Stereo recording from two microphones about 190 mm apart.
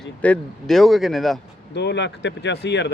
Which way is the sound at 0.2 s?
5° left (ahead or behind).